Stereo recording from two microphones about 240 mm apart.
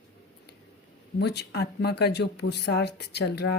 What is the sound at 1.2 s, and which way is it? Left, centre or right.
Speech, left.